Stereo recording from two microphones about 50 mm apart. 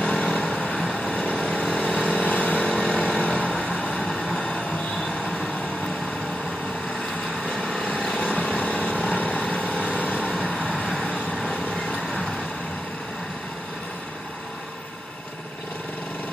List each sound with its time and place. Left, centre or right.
0.0 s vehicle: left
2.8 s vehicle: centre
3.1 s vehicle: left
7.4 s vehicle: centre
8.3 s vehicle: left